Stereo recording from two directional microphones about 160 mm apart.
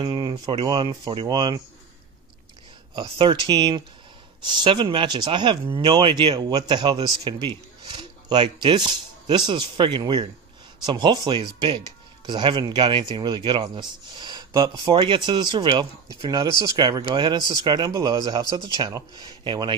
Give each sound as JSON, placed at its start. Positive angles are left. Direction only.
{"t": 0.0, "sound": "speech", "side_deg": -30}
{"t": 2.9, "sound": "speech", "side_deg": -30}